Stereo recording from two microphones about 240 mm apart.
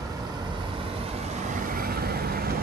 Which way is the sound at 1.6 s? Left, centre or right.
Right.